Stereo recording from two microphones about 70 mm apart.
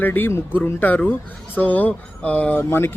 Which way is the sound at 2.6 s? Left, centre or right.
Left.